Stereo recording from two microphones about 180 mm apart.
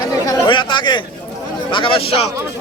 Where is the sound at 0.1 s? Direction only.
25° left (ahead or behind).